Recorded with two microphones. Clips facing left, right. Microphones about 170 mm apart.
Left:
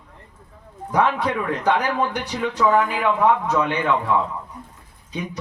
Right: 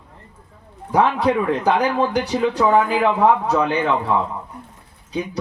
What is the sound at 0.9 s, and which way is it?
Speech, 30° right (ahead or behind).